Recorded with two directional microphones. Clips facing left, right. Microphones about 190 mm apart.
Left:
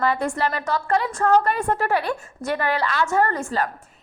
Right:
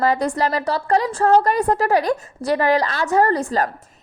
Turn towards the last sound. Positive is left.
turn(degrees=-40)  # may be behind; listen again after turning